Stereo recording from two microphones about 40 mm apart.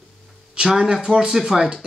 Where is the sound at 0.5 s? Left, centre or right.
Centre.